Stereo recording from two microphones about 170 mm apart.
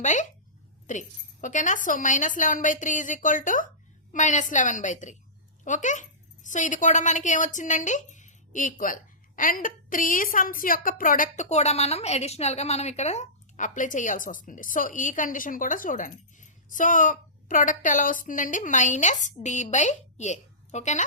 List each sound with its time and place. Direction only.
0.0 s a woman's voice: 45° left (ahead or behind)